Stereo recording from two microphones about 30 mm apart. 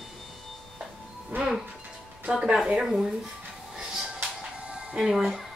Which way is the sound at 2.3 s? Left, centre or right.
Right.